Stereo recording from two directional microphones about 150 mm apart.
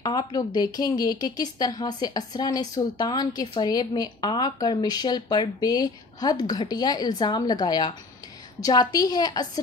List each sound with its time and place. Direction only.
0.0 s a woman's voice: 25° left (ahead or behind)